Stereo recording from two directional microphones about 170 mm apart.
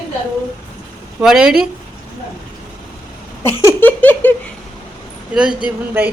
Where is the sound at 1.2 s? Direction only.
5° right (ahead or behind).